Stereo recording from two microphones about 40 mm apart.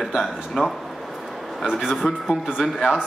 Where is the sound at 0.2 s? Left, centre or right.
Centre.